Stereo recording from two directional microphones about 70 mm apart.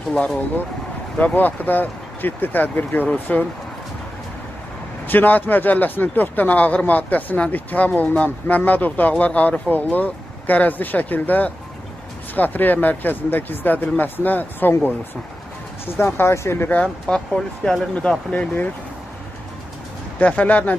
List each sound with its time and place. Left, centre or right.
0.1 s speech: centre
1.1 s speech: left
5.0 s speech: left
17.0 s speech: centre
18.3 s speech: left
20.2 s speech: left